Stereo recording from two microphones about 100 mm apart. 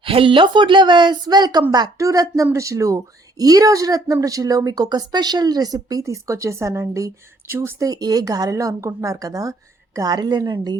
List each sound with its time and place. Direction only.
0.0 s a woman's voice: 65° right (ahead or behind); by 7.9 s 25° right (ahead or behind)
7.9 s speech: 40° right (ahead or behind)